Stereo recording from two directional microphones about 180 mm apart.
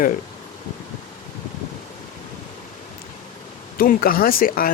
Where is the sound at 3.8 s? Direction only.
55° left (ahead or behind).